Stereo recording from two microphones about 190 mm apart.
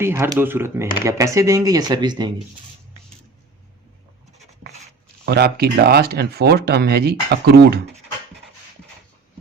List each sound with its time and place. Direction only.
0.0 s speech: 15° right (ahead or behind)
5.2 s speech: 55° right (ahead or behind)